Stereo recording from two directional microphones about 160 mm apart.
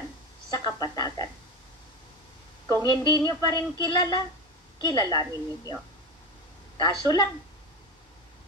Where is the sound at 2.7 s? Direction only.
25° left (ahead or behind).